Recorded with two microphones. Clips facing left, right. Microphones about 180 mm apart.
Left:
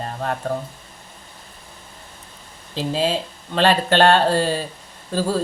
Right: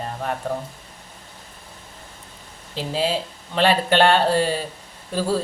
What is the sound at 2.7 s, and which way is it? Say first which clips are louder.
Speech: left 2 dB; 15° right (ahead or behind).